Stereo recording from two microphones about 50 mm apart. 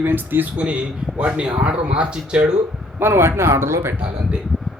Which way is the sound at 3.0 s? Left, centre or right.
Right.